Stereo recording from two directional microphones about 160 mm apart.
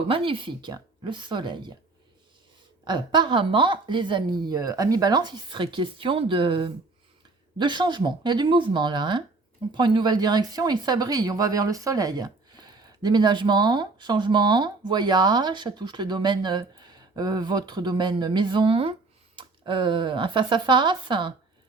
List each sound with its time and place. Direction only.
0.1 s speech: 35° right (ahead or behind)
2.8 s speech: 30° right (ahead or behind)